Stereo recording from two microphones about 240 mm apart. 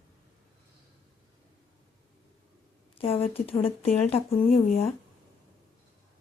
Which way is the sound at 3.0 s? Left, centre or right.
Left.